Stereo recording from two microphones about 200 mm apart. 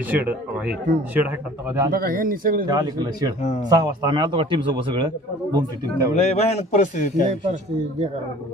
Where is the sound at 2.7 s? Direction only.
20° right (ahead or behind).